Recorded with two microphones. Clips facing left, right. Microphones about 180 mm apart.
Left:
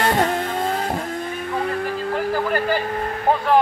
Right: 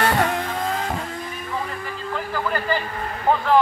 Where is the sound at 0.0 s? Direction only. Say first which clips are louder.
Left 1 dB; 25° left (ahead or behind).